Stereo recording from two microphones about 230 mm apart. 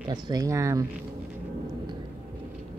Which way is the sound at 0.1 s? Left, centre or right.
Centre.